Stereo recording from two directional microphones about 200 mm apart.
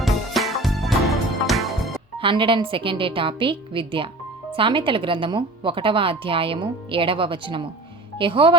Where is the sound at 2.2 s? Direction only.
25° right (ahead or behind).